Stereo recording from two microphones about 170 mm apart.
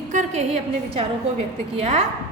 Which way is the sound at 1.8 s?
40° right (ahead or behind).